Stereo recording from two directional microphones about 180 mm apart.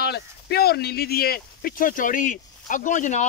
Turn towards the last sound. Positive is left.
turn(degrees=45)  # may be behind; listen again after turning